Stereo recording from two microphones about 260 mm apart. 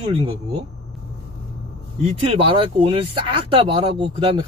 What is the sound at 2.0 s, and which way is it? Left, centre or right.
Speech, right.